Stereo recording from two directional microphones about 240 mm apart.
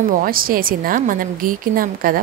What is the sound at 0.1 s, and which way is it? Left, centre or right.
A woman's voice, right.